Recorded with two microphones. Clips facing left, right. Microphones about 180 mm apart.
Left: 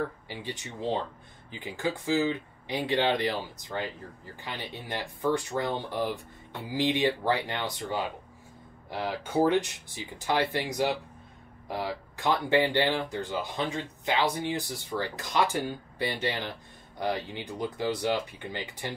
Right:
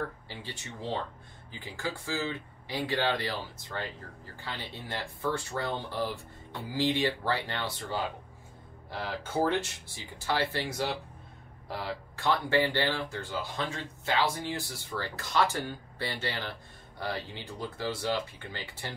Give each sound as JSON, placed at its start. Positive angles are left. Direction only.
{"t": 0.3, "sound": "speech", "side_deg": 15}